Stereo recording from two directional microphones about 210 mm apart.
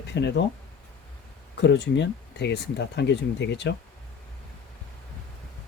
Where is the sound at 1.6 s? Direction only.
55° left (ahead or behind).